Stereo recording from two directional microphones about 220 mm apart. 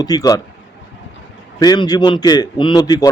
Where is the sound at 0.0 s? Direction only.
15° left (ahead or behind).